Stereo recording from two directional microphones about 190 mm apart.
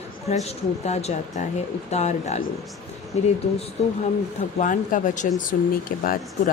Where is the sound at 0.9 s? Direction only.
35° left (ahead or behind).